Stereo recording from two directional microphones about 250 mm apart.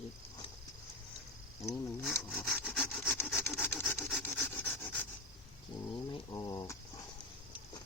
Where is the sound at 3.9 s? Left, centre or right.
Centre.